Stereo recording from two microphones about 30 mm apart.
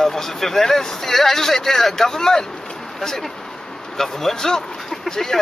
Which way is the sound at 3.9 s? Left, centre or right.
Centre.